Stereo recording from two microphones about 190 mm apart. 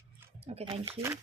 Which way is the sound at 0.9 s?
15° right (ahead or behind).